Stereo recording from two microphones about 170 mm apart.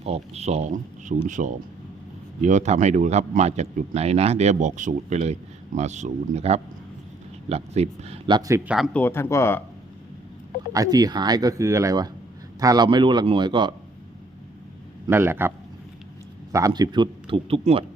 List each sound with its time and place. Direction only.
0.0 s speech: 35° right (ahead or behind)
8.4 s speech: 20° right (ahead or behind)
8.6 s speech: 5° right (ahead or behind)
8.9 s speech: 10° left (ahead or behind)
10.7 s speech: 20° right (ahead or behind)
15.0 s a man's voice: 15° right (ahead or behind); by 17.8 s 35° right (ahead or behind)